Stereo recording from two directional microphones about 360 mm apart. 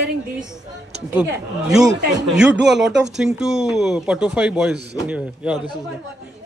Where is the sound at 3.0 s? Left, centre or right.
Centre.